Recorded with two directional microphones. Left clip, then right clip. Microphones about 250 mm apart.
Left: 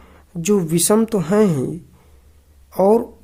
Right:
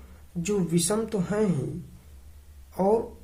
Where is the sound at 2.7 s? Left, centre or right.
Left.